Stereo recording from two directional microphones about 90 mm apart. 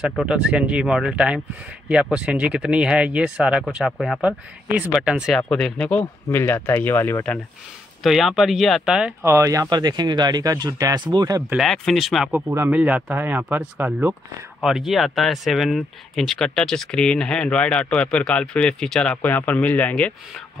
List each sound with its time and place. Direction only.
0.3 s speech: 10° right (ahead or behind)
5.5 s speech: 10° left (ahead or behind)
6.3 s speech: 25° left (ahead or behind)
8.0 s speech: centre (ahead or behind)
9.2 s speech: 35° right (ahead or behind)
11.5 s speech: 5° left (ahead or behind)
12.3 s speech: 25° right (ahead or behind)
14.6 s speech: 5° right (ahead or behind)
19.2 s speech: 20° left (ahead or behind)